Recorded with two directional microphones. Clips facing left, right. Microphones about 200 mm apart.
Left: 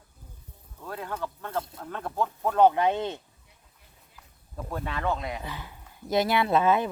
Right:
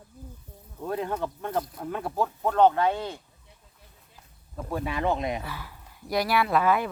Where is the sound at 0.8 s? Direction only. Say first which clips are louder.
Right 5 dB; 20° right (ahead or behind); by 3.2 s 20° left (ahead or behind).